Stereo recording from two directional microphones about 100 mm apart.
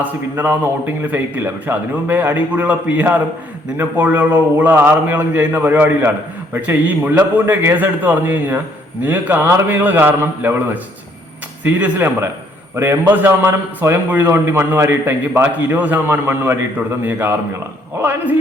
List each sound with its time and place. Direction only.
0.0 s a man's voice: 20° right (ahead or behind)